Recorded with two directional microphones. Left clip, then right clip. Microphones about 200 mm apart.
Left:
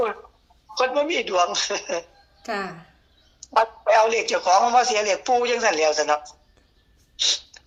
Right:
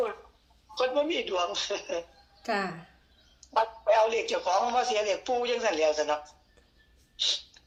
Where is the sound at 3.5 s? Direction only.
55° left (ahead or behind).